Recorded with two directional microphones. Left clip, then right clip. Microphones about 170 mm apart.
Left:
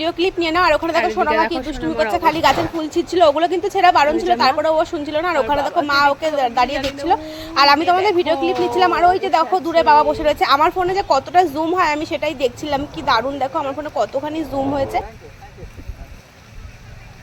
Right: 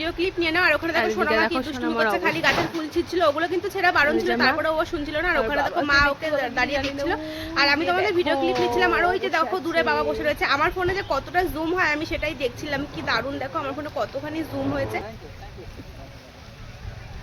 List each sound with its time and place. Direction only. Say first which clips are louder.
0.0 s a woman's voice: left 6 dB; 35° left (ahead or behind)
1.3 s speech: left 4 dB; centre (ahead or behind)
2.1 s a woman's voice: left 6 dB; 35° left (ahead or behind)
5.5 s speech: left 5 dB; centre (ahead or behind)
6.2 s a woman's voice: left 7 dB; 35° left (ahead or behind)
7.5 s a woman's voice: left 8 dB; 40° left (ahead or behind)